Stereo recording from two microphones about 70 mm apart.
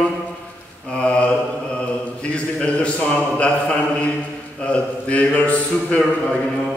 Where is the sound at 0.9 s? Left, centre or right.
Centre.